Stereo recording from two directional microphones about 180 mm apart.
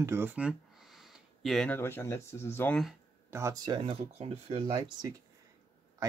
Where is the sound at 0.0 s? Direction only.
15° right (ahead or behind).